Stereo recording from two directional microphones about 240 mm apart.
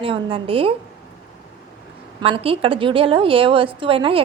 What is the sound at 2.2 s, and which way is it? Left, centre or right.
A woman's voice, right.